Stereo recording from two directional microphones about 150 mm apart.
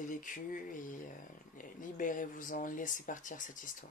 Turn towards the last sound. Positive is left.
turn(degrees=60)  # may be behind; listen again after turning